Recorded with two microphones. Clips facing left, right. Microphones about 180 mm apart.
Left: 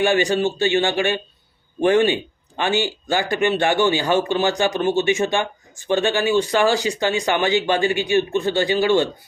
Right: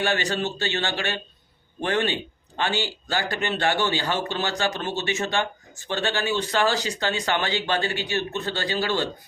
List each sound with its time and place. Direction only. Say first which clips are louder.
0.0 s speech: left 7 dB; 15° left (ahead or behind)